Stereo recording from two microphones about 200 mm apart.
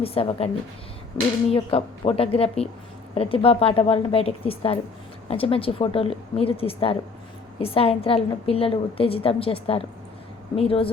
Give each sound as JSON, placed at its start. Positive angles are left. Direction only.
{"t": 0.0, "sound": "a woman's voice", "side_deg": 30}
{"t": 1.5, "sound": "a woman's voice", "side_deg": 30}